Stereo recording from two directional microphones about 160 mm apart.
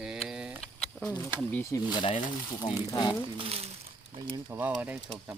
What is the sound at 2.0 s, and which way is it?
Speech, 35° left (ahead or behind).